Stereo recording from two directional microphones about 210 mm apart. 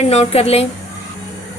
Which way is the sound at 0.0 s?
30° left (ahead or behind).